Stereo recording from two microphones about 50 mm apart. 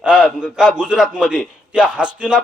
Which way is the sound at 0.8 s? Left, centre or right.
Centre.